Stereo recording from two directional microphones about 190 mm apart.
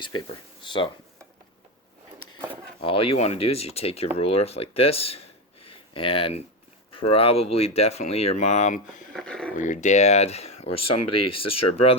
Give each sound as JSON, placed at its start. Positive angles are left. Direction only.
{"t": 0.0, "sound": "speech", "side_deg": 25}
{"t": 2.8, "sound": "speech", "side_deg": 30}
{"t": 9.1, "sound": "speech", "side_deg": 5}
{"t": 9.6, "sound": "speech", "side_deg": 40}